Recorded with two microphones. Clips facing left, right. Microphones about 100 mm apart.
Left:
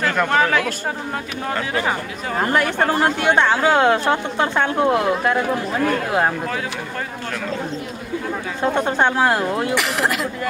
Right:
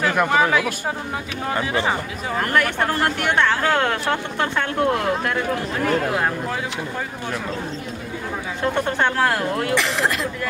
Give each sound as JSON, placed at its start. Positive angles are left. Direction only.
{"t": 0.0, "sound": "speech", "side_deg": -5}
{"t": 2.3, "sound": "speech", "side_deg": 20}
{"t": 8.7, "sound": "speech", "side_deg": 15}
{"t": 9.8, "sound": "speech", "side_deg": 5}